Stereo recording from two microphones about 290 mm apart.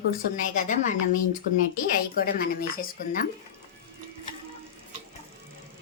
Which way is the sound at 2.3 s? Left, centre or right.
Left.